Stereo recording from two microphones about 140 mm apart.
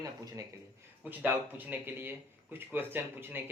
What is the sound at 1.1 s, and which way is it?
Speech, 10° right (ahead or behind).